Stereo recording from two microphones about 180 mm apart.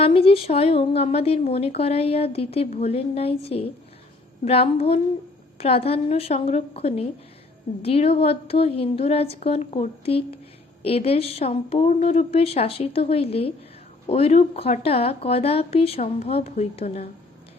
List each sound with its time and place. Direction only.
0.0 s a woman's voice: 30° left (ahead or behind)